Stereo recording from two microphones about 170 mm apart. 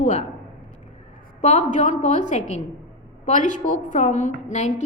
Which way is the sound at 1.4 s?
40° left (ahead or behind).